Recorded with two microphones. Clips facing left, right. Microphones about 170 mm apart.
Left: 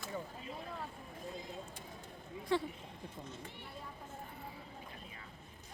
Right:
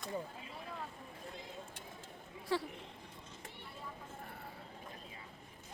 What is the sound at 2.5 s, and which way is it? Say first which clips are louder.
Speech: left 2 dB; 5° right (ahead or behind).